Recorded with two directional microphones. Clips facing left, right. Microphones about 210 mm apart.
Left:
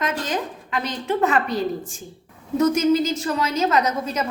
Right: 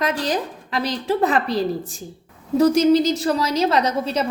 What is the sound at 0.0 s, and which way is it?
A woman's voice, 35° right (ahead or behind).